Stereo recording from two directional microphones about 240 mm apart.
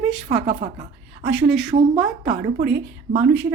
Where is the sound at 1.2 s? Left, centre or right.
Centre.